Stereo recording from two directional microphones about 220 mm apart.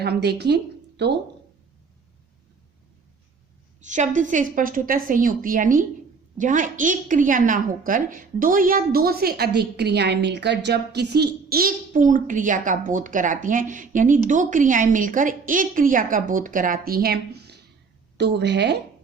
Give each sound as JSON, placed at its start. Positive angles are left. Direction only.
{"t": 0.0, "sound": "speech", "side_deg": -45}
{"t": 3.8, "sound": "a woman's voice", "side_deg": -35}